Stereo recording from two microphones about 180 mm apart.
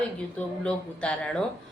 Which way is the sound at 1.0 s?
5° left (ahead or behind).